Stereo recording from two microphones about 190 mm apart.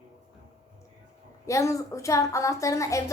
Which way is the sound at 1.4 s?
15° left (ahead or behind).